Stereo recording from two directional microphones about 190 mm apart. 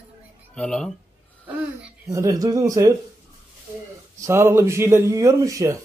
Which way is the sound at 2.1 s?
15° right (ahead or behind).